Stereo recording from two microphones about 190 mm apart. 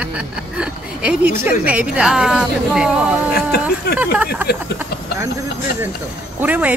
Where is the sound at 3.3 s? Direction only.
55° left (ahead or behind).